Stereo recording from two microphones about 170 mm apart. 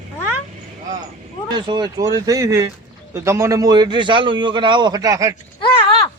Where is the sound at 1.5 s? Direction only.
25° right (ahead or behind).